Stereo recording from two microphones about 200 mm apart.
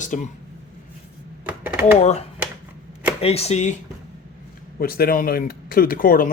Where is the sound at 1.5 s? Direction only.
10° right (ahead or behind).